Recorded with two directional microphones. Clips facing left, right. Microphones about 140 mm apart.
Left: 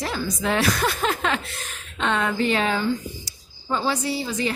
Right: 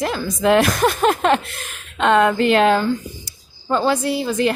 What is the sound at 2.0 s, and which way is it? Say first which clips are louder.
A woman's voice: right 8 dB; 65° right (ahead or behind).